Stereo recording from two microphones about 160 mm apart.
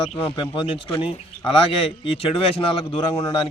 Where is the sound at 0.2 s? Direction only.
35° left (ahead or behind).